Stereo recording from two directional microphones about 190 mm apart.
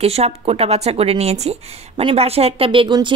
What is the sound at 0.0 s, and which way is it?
A woman's voice, 35° right (ahead or behind).